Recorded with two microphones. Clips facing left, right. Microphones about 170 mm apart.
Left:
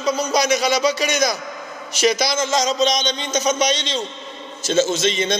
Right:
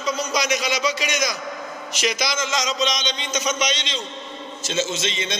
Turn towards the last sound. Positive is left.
turn(degrees=40)  # may be behind; listen again after turning